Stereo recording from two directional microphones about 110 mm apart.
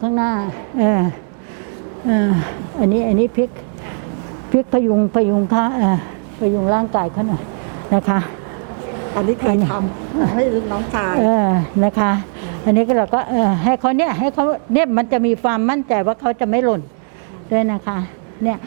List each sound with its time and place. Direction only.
0.0 s a woman's voice: 20° right (ahead or behind)
2.0 s a woman's voice: 20° right (ahead or behind)
4.5 s a woman's voice: 25° right (ahead or behind)
9.5 s a woman's voice: 20° right (ahead or behind)